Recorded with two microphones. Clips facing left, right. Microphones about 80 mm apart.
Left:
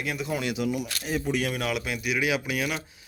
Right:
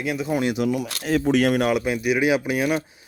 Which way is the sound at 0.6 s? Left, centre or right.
Right.